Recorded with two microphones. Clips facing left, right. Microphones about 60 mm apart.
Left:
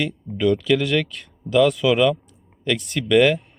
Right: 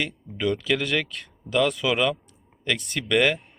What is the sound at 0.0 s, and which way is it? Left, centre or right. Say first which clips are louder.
Speech: left 5 dB; centre.